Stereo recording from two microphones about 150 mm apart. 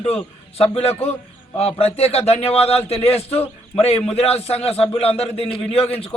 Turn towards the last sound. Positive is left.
turn(degrees=40)  # may be behind; listen again after turning